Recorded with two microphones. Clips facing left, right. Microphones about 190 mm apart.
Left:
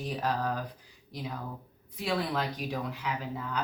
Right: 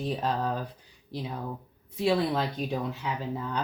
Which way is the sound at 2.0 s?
25° right (ahead or behind).